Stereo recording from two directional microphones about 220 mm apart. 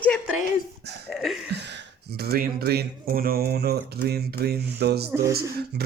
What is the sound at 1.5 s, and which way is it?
Speech, 50° right (ahead or behind).